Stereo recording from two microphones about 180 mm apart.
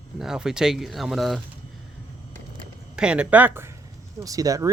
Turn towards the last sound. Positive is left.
turn(degrees=-20)  # may be behind; listen again after turning